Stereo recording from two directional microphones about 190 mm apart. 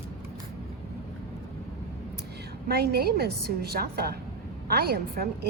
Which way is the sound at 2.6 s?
55° right (ahead or behind).